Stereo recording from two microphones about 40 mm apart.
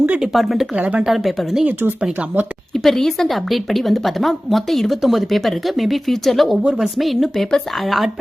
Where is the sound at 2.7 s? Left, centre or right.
Centre.